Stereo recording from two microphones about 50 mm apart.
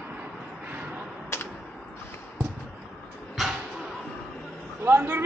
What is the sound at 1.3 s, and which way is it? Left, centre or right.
Typewriter, left.